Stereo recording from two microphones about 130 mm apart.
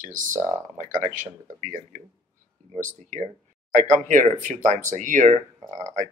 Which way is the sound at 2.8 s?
80° right.